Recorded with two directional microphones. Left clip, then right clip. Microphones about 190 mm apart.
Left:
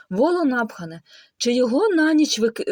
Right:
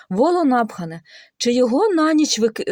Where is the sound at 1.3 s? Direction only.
10° right (ahead or behind).